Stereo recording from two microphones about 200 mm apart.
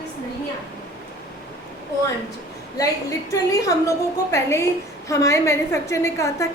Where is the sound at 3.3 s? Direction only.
15° left (ahead or behind).